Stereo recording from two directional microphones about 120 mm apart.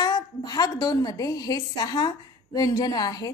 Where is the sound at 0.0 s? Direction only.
35° left (ahead or behind).